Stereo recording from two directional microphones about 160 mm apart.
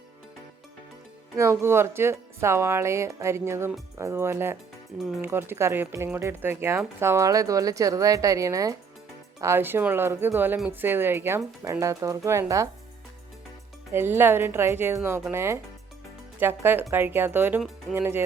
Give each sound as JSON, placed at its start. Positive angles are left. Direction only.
{"t": 1.4, "sound": "speech", "side_deg": -15}
{"t": 4.9, "sound": "speech", "side_deg": 0}
{"t": 5.2, "sound": "speech", "side_deg": -15}
{"t": 13.9, "sound": "speech", "side_deg": -15}